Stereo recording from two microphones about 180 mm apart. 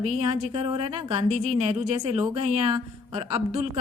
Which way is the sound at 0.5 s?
30° right (ahead or behind).